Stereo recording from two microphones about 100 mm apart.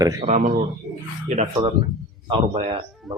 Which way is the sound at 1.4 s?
60° right (ahead or behind).